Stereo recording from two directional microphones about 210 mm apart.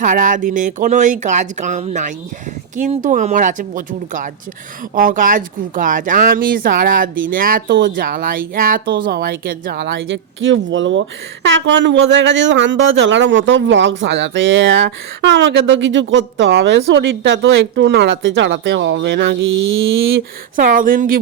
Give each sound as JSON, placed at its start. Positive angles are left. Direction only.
{"t": 0.0, "sound": "speech", "side_deg": -40}
{"t": 20.6, "sound": "speech", "side_deg": -40}